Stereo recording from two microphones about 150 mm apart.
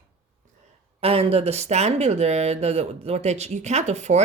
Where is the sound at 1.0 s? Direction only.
40° right (ahead or behind).